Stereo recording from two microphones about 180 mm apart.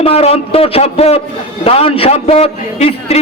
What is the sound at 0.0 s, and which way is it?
A man's voice, 35° left (ahead or behind).